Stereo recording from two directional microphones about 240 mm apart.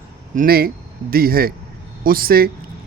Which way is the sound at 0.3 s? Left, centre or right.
Right.